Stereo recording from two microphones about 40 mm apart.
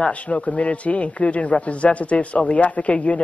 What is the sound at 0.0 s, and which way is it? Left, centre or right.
A man's voice, left.